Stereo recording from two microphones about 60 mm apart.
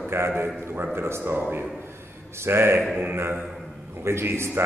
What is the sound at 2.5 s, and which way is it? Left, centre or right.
Speech, right.